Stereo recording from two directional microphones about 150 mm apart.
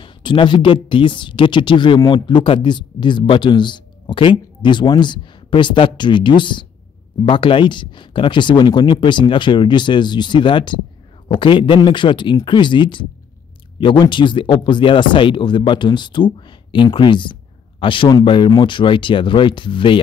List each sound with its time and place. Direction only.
0.0 s speech: 30° left (ahead or behind)